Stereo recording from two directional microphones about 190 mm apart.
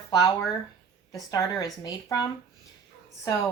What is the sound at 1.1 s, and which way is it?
Speech, 20° left (ahead or behind).